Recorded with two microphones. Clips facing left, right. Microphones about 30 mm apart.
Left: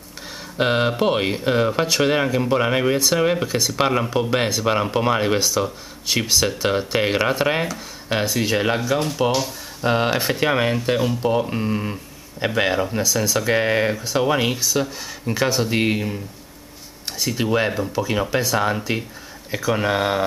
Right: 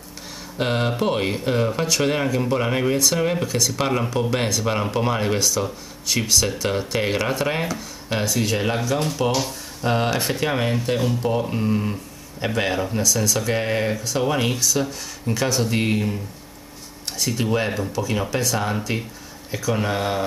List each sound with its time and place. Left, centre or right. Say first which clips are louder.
0.6 s speech: left 3 dB; centre
17.2 s speech: left 2 dB; centre